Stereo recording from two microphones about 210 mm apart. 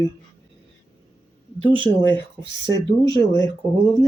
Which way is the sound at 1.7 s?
25° right (ahead or behind).